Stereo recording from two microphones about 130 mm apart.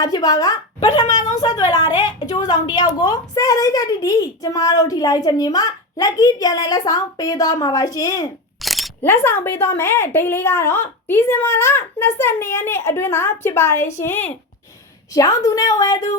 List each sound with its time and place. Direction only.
0.0 s a woman's voice: 30° left (ahead or behind)
8.6 s a sound: centre (ahead or behind)
9.0 s a woman's voice: 20° left (ahead or behind)
15.1 s a woman's voice: 25° left (ahead or behind)